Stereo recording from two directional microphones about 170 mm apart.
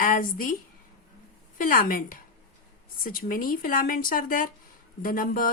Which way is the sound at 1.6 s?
55° left (ahead or behind).